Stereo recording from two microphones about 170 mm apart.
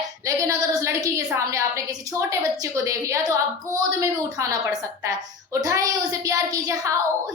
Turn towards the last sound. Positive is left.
turn(degrees=-20)  # may be behind; listen again after turning